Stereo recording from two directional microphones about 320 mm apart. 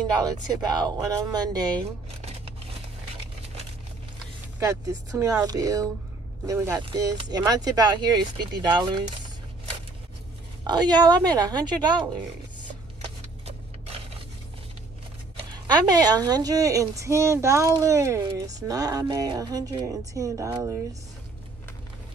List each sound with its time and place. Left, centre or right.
0.5 s a woman's voice: centre
4.6 s a woman's voice: centre
10.6 s a woman's voice: centre
15.6 s a woman's voice: centre